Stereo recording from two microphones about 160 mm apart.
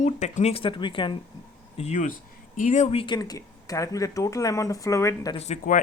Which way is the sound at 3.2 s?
20° left (ahead or behind).